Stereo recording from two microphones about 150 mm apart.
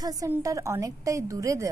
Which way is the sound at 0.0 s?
25° right (ahead or behind).